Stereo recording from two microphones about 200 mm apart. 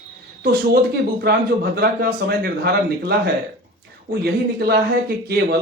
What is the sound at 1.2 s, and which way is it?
A man's voice, 50° right (ahead or behind).